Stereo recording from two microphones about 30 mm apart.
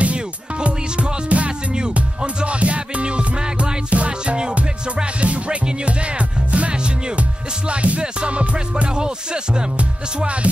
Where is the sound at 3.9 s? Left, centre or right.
Right.